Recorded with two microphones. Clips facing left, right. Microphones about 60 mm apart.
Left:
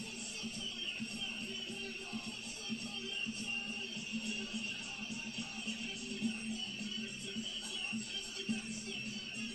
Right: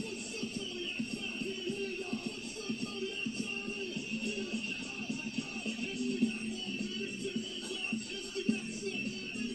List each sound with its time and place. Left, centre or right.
4.2 s music: right
8.5 s music: right